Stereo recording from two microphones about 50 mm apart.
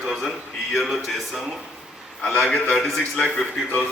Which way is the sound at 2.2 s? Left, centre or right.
Centre.